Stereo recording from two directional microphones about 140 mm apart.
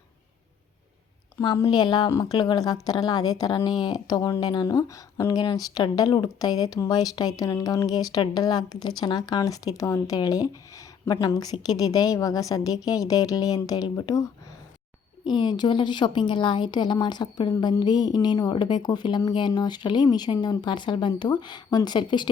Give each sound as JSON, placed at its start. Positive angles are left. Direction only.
{"t": 1.4, "sound": "a woman's voice", "side_deg": 25}
{"t": 15.3, "sound": "a woman's voice", "side_deg": 30}